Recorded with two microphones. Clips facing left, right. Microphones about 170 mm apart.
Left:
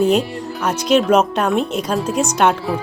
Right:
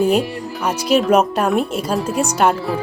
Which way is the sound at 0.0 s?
10° right (ahead or behind).